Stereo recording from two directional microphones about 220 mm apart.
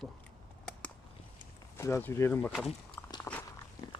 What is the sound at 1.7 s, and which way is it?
Speech, 10° left (ahead or behind).